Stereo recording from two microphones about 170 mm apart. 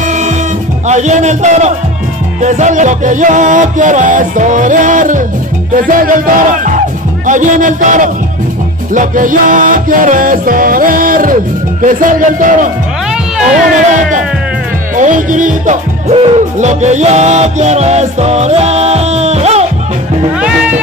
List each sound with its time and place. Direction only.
0.8 s music: 45° right (ahead or behind)
15.0 s music: 50° right (ahead or behind)
20.3 s music: 5° right (ahead or behind)